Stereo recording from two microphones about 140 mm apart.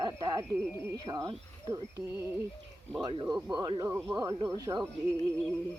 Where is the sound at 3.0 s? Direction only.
30° right (ahead or behind).